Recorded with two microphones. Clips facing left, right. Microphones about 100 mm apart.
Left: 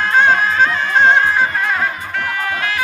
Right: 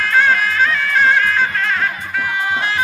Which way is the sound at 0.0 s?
25° left (ahead or behind).